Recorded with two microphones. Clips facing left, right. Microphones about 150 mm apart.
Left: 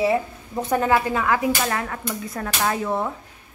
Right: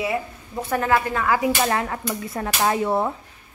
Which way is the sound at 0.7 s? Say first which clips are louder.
Left 1 dB; 20° left (ahead or behind).